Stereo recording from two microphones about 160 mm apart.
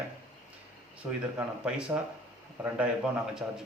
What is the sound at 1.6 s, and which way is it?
Speech, 5° right (ahead or behind).